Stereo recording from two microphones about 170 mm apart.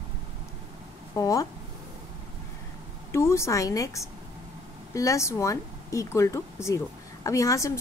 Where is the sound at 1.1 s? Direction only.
20° left (ahead or behind).